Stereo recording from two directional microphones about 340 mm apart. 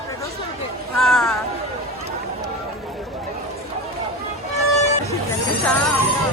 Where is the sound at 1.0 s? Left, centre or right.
Centre.